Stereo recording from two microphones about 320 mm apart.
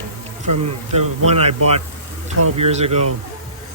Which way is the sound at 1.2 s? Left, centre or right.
Centre.